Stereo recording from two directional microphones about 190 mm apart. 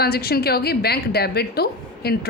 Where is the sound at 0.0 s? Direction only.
55° left (ahead or behind).